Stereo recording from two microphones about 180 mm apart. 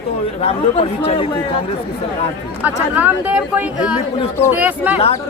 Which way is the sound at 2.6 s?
10° right (ahead or behind).